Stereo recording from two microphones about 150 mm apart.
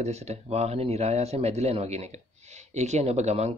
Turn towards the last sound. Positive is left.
turn(degrees=-45)  # may be behind; listen again after turning